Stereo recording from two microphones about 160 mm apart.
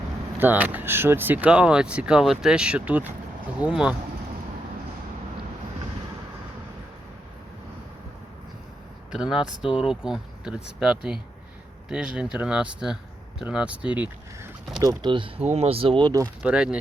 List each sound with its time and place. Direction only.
0.3 s speech: 10° right (ahead or behind)
9.1 s speech: 5° right (ahead or behind)
14.8 s speech: 25° right (ahead or behind)
16.4 s speech: 5° right (ahead or behind)